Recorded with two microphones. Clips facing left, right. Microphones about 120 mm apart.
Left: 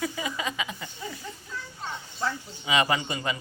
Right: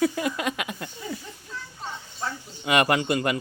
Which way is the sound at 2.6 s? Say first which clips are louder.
Right 4 dB; 60° right (ahead or behind).